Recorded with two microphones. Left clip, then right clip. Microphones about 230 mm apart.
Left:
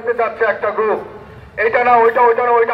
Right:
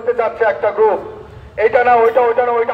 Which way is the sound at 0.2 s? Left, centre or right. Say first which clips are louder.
Right 1 dB; right.